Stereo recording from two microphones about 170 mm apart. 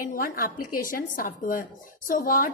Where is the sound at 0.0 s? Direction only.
60° left (ahead or behind).